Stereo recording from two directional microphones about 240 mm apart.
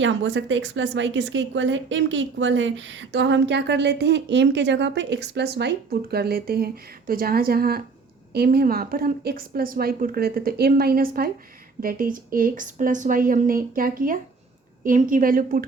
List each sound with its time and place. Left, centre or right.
0.0 s a woman's voice: right